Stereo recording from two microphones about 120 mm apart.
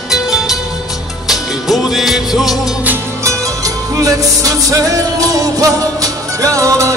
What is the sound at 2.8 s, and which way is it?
Music, 20° right (ahead or behind).